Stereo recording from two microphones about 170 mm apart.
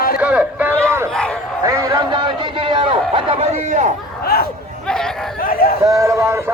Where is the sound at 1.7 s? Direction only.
20° right (ahead or behind).